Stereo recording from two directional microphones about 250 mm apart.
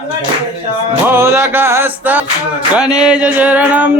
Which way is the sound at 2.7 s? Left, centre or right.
Centre.